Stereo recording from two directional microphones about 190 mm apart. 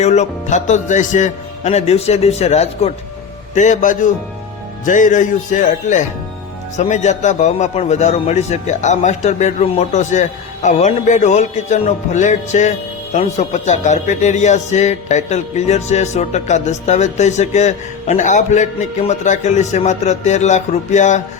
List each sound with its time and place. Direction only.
0.0 s speech: 35° left (ahead or behind)